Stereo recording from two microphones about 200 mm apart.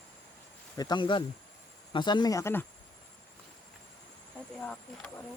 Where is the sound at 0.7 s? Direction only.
20° left (ahead or behind).